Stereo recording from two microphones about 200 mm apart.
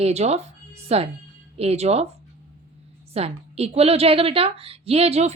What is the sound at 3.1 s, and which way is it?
Speech, 30° right (ahead or behind).